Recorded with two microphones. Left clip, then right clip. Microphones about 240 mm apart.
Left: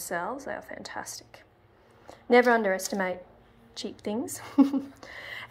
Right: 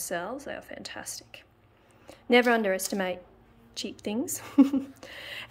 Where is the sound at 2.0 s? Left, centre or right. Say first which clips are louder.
Left 2 dB; centre.